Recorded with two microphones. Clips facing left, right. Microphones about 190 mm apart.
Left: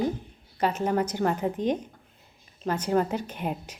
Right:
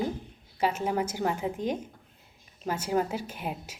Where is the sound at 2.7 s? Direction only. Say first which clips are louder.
Left 3 dB; 10° right (ahead or behind).